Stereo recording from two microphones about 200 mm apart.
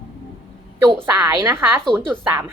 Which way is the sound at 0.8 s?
15° right (ahead or behind).